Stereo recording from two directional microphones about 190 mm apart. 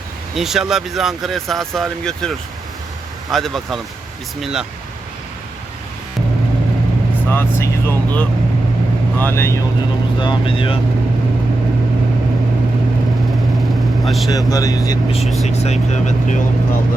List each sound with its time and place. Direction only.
0.3 s speech: centre (ahead or behind)
7.3 s speech: 10° left (ahead or behind)
10.2 s speech: 25° left (ahead or behind)
14.0 s speech: centre (ahead or behind)
14.3 s speech: 20° left (ahead or behind)
15.4 s speech: 35° left (ahead or behind)